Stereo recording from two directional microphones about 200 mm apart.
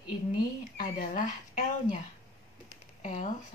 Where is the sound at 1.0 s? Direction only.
40° left (ahead or behind).